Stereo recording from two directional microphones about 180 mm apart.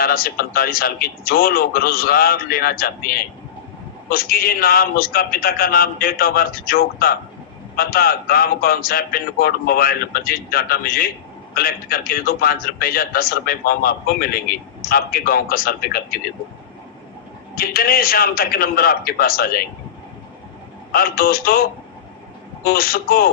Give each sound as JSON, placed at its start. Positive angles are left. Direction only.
{"t": 0.0, "sound": "a man's voice", "side_deg": 55}
{"t": 17.5, "sound": "a man's voice", "side_deg": 55}
{"t": 20.9, "sound": "a man's voice", "side_deg": 55}